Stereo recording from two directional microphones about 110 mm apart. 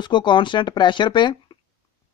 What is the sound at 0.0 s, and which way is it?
Speech, 45° left (ahead or behind).